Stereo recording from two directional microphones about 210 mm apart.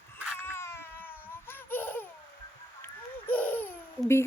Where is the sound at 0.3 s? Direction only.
10° left (ahead or behind).